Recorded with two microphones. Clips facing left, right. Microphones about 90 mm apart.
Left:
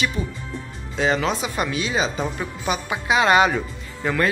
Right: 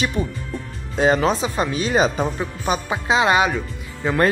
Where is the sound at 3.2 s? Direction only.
20° right (ahead or behind).